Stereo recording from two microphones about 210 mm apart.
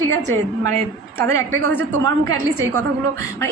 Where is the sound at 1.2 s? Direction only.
10° left (ahead or behind).